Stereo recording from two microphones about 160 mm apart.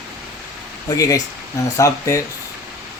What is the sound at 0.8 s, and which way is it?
Speech, 20° left (ahead or behind).